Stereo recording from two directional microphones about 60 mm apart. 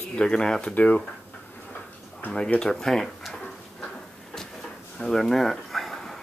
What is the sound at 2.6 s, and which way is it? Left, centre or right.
Speech, centre.